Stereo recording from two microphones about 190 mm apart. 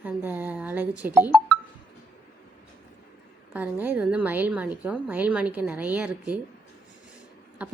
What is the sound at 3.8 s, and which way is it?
A woman's voice, 10° right (ahead or behind).